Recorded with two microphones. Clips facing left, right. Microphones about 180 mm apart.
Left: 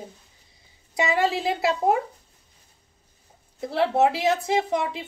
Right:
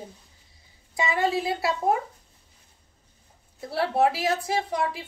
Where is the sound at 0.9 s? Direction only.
20° left (ahead or behind).